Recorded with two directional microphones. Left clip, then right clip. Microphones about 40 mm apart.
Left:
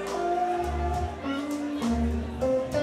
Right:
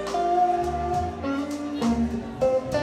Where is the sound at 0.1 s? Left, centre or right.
Right.